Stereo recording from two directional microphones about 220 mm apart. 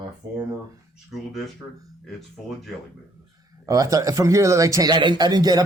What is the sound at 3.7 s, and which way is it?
Speech, 15° right (ahead or behind).